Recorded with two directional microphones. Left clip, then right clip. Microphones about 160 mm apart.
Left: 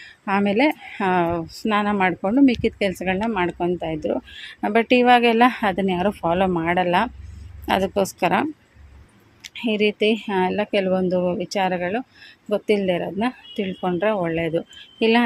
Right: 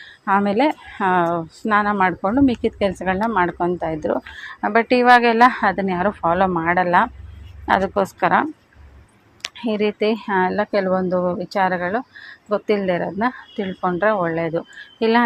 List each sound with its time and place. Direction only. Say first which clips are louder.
0.3 s a woman's voice: right 2 dB; 15° left (ahead or behind)
4.6 s a woman's voice: right 2 dB; 20° left (ahead or behind)
9.6 s a woman's voice: even; 10° left (ahead or behind)